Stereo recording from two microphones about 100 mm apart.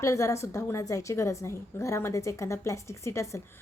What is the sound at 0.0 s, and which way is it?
A woman's voice, 30° left (ahead or behind).